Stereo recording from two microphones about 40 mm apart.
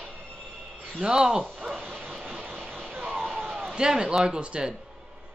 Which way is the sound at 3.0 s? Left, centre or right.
Centre.